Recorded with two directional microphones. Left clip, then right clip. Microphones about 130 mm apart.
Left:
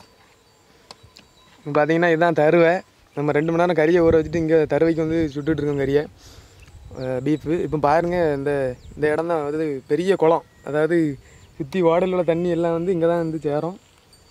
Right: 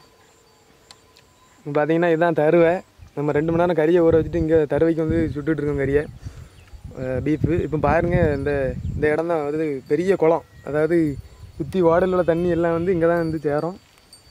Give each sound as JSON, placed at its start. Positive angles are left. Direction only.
{"t": 1.6, "sound": "speech", "side_deg": 35}